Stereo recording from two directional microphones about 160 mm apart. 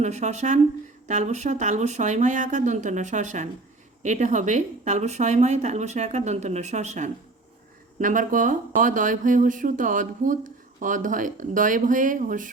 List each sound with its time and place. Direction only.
0.0 s speech: 45° right (ahead or behind)